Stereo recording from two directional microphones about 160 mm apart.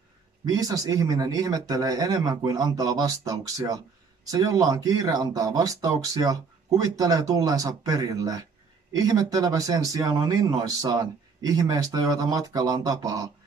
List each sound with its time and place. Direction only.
0.5 s speech: 20° right (ahead or behind)